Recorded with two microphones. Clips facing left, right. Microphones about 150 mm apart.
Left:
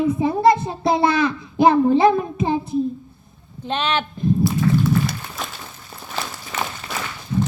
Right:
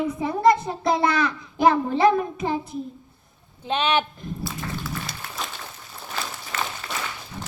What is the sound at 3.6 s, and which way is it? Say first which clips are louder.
Speech: even; 10° right (ahead or behind).